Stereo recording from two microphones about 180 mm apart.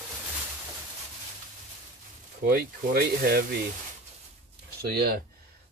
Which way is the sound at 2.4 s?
55° right (ahead or behind).